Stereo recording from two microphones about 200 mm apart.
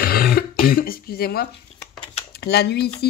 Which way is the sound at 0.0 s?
50° left (ahead or behind).